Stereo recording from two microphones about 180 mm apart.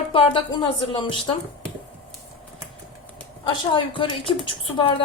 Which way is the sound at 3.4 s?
30° left (ahead or behind).